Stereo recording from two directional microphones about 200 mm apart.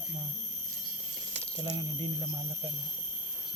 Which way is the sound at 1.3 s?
30° right (ahead or behind).